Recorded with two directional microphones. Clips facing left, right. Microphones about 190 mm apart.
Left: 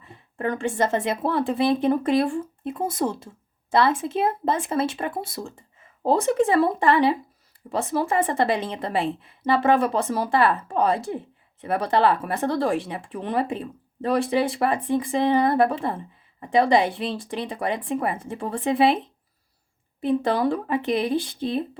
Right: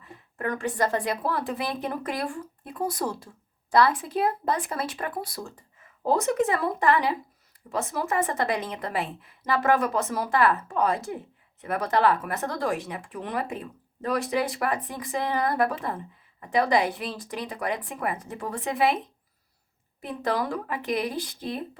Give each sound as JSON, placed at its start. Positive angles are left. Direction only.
{"t": 0.0, "sound": "speech", "side_deg": 30}